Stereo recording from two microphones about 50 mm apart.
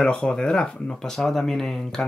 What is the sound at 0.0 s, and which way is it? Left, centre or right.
Speech, centre.